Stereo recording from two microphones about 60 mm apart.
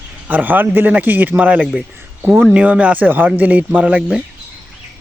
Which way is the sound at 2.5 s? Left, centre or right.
Right.